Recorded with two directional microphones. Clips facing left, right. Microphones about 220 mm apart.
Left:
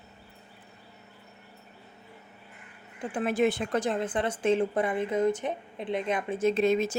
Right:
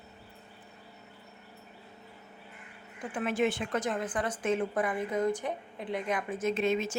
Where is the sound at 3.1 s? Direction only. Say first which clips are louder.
Left 3 dB; 35° left (ahead or behind).